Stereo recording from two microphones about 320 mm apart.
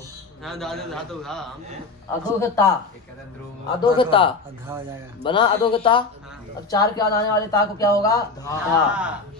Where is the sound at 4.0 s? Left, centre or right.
Centre.